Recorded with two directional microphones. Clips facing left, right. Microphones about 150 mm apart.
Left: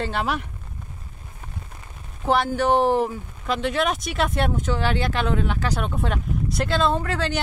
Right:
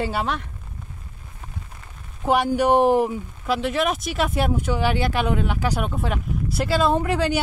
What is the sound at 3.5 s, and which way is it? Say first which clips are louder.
Speech: right 1 dB; 5° right (ahead or behind).